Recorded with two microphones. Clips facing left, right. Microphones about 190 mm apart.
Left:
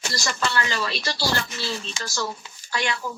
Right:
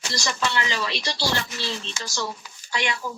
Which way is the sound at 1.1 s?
5° left (ahead or behind).